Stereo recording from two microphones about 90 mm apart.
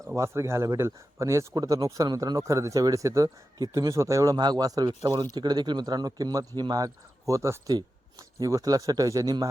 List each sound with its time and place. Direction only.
0.2 s speech: 30° right (ahead or behind)